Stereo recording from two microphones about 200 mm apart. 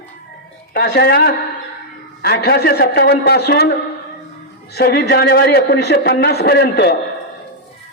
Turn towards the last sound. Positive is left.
turn(degrees=55)  # may be behind; listen again after turning